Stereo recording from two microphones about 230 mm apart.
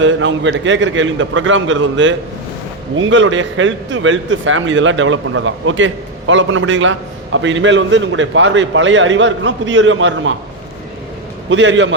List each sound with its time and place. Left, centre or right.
0.0 s a man's voice: right
11.4 s a man's voice: right